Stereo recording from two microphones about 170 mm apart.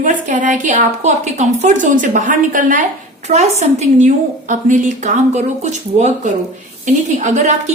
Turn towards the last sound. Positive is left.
turn(degrees=-45)  # may be behind; listen again after turning